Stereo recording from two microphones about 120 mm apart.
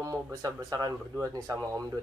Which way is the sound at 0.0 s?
30° right (ahead or behind).